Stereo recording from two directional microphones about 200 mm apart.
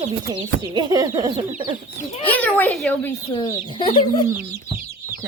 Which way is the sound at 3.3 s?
25° left (ahead or behind).